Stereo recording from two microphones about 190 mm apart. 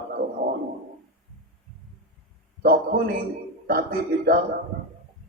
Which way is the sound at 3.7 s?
50° right (ahead or behind).